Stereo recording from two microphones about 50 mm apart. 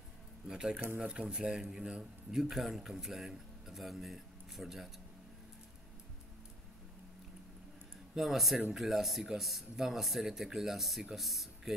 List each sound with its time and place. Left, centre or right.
0.5 s speech: centre
8.2 s speech: centre